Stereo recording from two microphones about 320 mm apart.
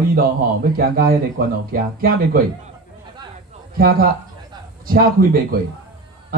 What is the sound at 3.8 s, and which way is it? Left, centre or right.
A man's voice, right.